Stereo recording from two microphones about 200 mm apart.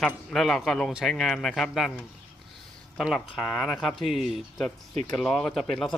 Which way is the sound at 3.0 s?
Centre (ahead or behind).